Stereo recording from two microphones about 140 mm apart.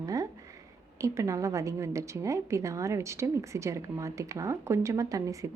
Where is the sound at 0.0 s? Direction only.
25° right (ahead or behind).